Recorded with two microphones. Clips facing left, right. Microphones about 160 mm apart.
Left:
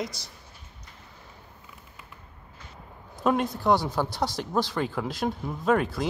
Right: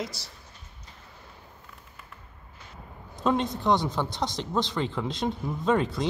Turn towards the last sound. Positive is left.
turn(degrees=5)  # may be behind; listen again after turning